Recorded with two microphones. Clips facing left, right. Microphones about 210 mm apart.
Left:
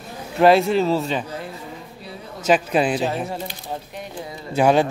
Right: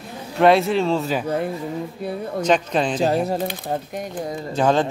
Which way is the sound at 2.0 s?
55° right (ahead or behind).